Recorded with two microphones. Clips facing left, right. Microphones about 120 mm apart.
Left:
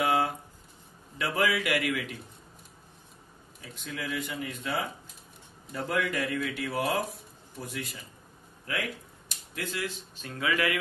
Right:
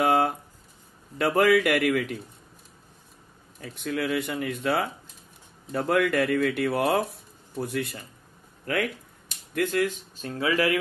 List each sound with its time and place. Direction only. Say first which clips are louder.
0.0 s a sound: right 4 dB; 50° right (ahead or behind)
1.1 s a man's voice: right 8 dB; 55° right (ahead or behind)
3.6 s speech: right 9 dB; 55° right (ahead or behind)
9.5 s speech: right 10 dB; 50° right (ahead or behind); by 10.8 s 35° right (ahead or behind)